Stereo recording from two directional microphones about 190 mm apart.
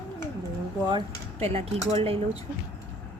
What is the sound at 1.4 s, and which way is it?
Speech, 35° right (ahead or behind).